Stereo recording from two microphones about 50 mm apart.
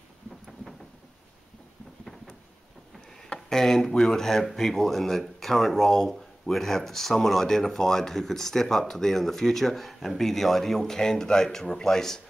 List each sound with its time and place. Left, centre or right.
3.3 s speech: centre